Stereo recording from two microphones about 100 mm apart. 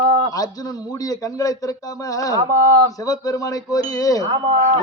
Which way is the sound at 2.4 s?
35° right (ahead or behind).